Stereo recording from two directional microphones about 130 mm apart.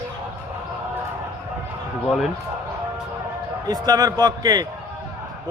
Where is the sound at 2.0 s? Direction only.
Centre (ahead or behind).